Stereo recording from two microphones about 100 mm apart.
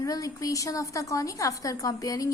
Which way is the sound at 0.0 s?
35° left (ahead or behind).